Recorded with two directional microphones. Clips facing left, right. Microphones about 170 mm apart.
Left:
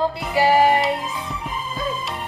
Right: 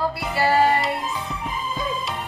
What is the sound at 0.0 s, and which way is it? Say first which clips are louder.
Music: left 3 dB; 20° left (ahead or behind).